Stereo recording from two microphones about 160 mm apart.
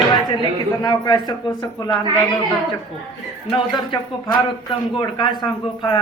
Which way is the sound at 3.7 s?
25° left (ahead or behind).